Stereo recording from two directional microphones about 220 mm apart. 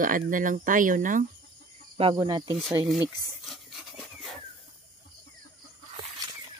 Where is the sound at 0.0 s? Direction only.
40° right (ahead or behind).